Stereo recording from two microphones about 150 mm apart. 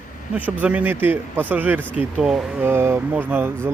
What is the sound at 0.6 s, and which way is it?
Speech, 10° right (ahead or behind).